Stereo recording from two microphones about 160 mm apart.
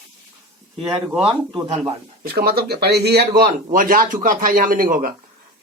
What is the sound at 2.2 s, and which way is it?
Speech, 75° right (ahead or behind).